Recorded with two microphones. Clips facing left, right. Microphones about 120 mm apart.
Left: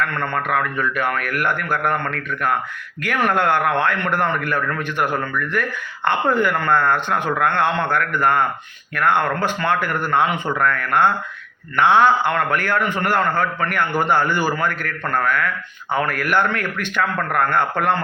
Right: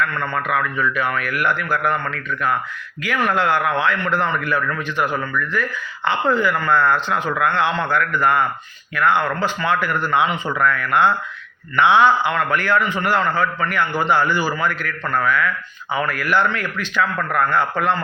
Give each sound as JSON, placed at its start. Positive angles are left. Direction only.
{"t": 0.2, "sound": "a man's voice", "side_deg": 50}